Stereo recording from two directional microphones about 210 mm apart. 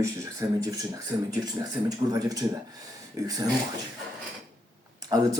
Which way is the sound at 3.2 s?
15° right (ahead or behind).